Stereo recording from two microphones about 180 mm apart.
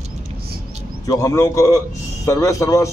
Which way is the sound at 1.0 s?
20° left (ahead or behind).